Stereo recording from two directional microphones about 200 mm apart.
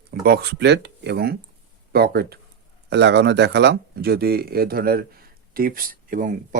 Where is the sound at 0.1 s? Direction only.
50° right (ahead or behind).